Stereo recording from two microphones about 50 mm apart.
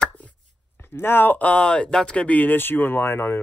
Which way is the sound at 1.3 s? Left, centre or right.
Left.